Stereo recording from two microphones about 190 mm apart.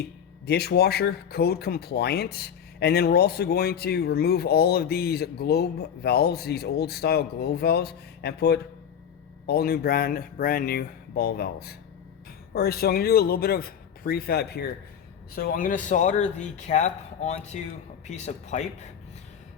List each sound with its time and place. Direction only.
0.0 s speech: 60° left (ahead or behind); by 18.7 s 40° left (ahead or behind)